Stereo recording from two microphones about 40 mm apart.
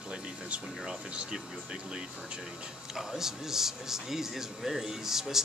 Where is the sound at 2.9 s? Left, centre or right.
Centre.